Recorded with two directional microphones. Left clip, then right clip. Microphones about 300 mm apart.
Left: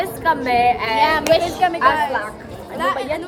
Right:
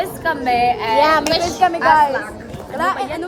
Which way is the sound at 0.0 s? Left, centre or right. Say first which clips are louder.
Left 1 dB; centre.